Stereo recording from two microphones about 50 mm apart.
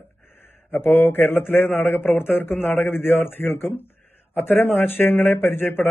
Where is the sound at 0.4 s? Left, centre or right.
Left.